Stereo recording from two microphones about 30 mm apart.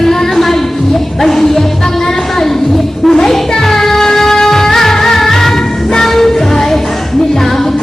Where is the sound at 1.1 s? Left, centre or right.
Centre.